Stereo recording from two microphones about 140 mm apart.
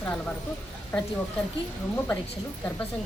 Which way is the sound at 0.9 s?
10° left (ahead or behind).